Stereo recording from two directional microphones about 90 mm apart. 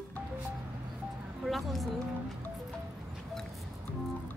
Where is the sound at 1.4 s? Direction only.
Centre (ahead or behind).